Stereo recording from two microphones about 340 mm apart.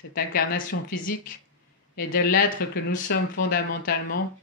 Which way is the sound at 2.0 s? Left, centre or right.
Left.